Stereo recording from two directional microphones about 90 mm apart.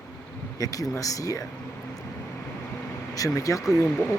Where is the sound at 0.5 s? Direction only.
40° left (ahead or behind).